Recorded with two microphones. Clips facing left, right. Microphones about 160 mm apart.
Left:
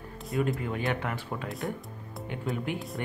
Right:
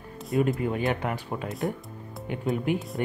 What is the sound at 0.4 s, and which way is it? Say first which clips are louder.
Speech: right 4 dB; 20° right (ahead or behind).